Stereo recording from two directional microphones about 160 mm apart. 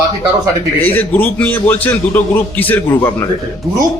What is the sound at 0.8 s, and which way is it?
A man's voice, 10° left (ahead or behind).